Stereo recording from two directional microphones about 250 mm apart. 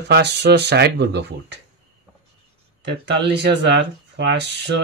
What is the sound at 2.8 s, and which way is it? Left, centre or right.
Speech, right.